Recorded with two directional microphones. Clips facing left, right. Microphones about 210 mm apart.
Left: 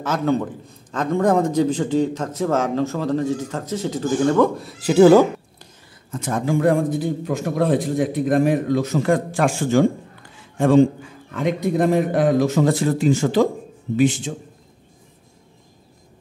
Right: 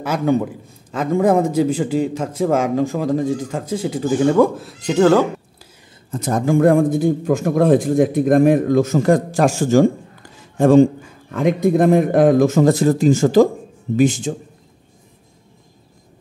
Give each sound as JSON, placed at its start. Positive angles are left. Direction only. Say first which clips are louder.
{"t": 0.0, "sound": "a man's voice", "louder": "right 3 dB", "side_deg": -10}
{"t": 6.1, "sound": "a man's voice", "louder": "right 4 dB", "side_deg": -40}